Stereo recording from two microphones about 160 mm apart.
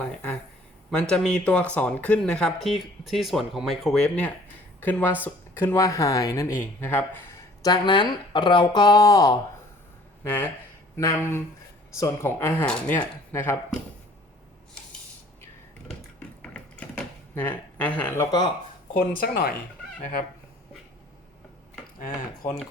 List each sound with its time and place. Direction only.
0.0 s a sound: 10° left (ahead or behind)
0.9 s speech: 5° left (ahead or behind)
7.6 s speech: 30° left (ahead or behind)
17.3 s speech: 10° left (ahead or behind)
18.9 s speech: 70° left (ahead or behind)